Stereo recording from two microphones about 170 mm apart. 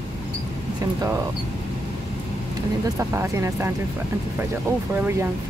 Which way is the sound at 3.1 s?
15° right (ahead or behind).